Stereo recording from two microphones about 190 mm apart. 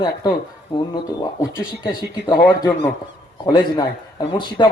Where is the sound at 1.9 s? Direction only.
20° left (ahead or behind).